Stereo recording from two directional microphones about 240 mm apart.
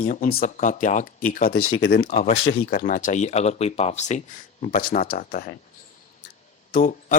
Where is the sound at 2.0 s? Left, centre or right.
Left.